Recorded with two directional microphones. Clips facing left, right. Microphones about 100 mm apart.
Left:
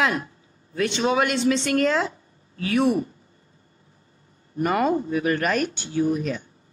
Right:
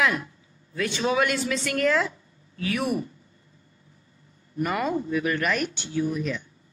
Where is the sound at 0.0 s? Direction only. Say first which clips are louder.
Left 1 dB; 40° left (ahead or behind).